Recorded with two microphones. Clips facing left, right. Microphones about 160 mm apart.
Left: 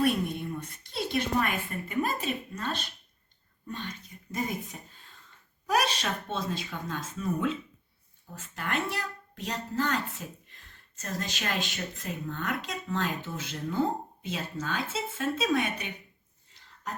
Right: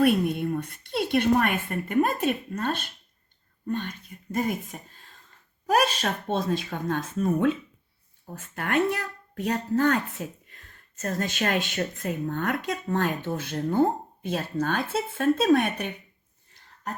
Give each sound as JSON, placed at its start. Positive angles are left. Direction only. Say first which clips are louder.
{"t": 0.0, "sound": "a woman's voice", "louder": "right 6 dB", "side_deg": -60}